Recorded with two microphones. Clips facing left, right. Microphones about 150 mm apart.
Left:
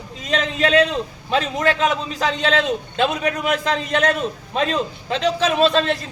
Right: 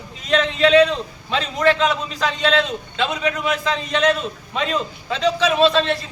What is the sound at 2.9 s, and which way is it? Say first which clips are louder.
A man's voice: even; 45° left (ahead or behind).